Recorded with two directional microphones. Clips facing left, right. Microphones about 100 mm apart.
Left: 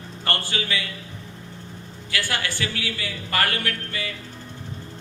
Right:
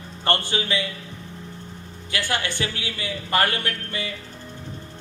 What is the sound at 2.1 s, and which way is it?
A man's voice, 20° right (ahead or behind).